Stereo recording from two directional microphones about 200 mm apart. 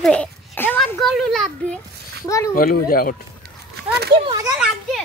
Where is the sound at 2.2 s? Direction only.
15° left (ahead or behind).